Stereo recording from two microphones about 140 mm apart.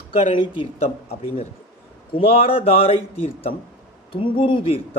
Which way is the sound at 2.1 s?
40° left (ahead or behind).